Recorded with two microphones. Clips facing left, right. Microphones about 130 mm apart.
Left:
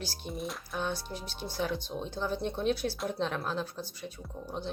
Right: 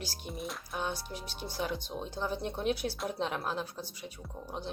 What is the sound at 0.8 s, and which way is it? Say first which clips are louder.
Speech: left 2 dB; 10° right (ahead or behind).